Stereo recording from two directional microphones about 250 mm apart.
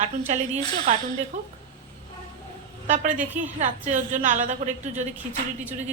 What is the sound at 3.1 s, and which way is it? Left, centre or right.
Speech, centre.